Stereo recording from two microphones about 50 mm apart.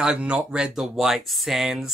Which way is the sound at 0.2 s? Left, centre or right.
Right.